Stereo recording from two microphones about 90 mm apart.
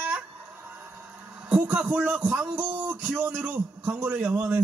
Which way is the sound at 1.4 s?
15° right (ahead or behind).